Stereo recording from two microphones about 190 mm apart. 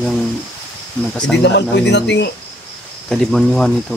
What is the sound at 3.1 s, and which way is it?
Speech, 5° left (ahead or behind).